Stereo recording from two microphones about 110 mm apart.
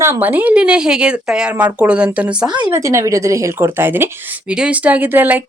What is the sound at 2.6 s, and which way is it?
Speech, 25° right (ahead or behind).